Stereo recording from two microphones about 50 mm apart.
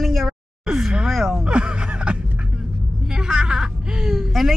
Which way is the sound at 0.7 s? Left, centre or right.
Centre.